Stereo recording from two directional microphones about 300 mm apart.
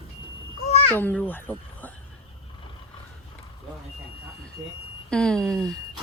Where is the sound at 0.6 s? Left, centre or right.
Left.